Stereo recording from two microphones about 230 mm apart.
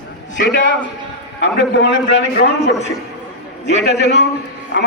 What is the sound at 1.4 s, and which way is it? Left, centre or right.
A man's voice, left.